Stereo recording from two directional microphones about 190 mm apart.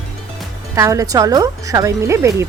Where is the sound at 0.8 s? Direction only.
15° right (ahead or behind).